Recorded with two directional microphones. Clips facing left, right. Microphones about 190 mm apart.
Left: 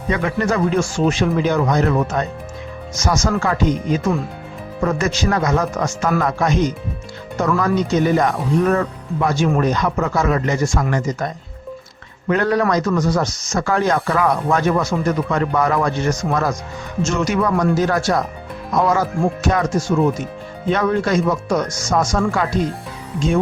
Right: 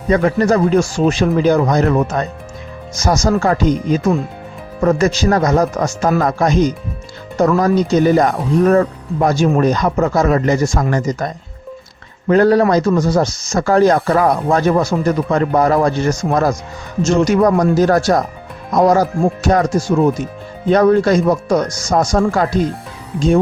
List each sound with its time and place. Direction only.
0.1 s speech: 40° right (ahead or behind)
12.3 s speech: 35° right (ahead or behind)
20.7 s speech: 35° right (ahead or behind)